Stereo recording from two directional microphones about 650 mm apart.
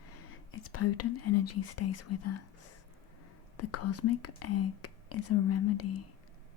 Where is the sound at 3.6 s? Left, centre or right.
Left.